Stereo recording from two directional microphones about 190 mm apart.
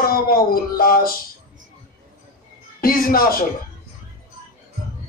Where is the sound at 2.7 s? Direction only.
50° left (ahead or behind).